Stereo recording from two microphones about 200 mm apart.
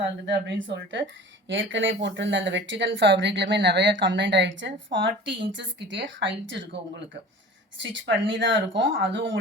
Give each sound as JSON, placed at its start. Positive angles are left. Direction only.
{"t": 0.3, "sound": "speech", "side_deg": -60}
{"t": 7.8, "sound": "speech", "side_deg": -65}